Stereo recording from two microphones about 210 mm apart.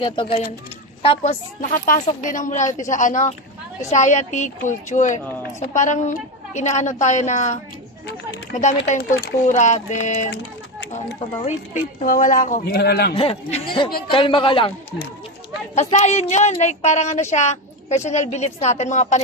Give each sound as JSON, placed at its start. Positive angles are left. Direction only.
{"t": 0.0, "sound": "a man's voice", "side_deg": 25}
{"t": 11.4, "sound": "speech", "side_deg": 35}
{"t": 13.1, "sound": "a man's voice", "side_deg": 25}
{"t": 15.7, "sound": "speech", "side_deg": 35}